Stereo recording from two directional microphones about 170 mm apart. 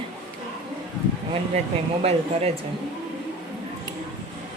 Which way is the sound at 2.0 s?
40° right (ahead or behind).